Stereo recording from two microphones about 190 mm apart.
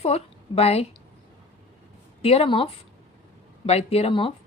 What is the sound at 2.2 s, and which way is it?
A woman's voice, 30° left (ahead or behind).